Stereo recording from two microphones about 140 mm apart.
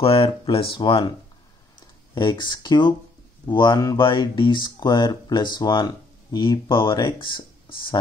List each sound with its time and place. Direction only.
0.0 s speech: 40° left (ahead or behind)
2.1 s speech: 35° left (ahead or behind)